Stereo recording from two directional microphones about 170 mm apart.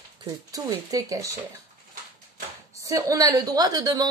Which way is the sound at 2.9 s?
20° right (ahead or behind).